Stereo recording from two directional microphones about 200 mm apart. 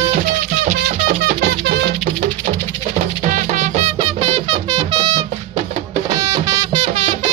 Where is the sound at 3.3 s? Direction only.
35° right (ahead or behind).